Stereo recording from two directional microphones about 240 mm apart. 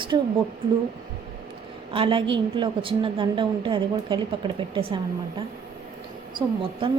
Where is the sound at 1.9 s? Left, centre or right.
Right.